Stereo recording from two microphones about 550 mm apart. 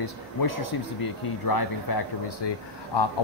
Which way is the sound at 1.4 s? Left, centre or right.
Left.